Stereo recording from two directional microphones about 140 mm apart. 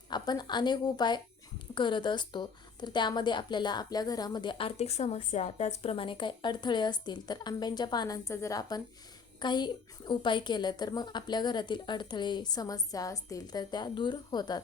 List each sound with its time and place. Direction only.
0.1 s a woman's voice: 30° left (ahead or behind)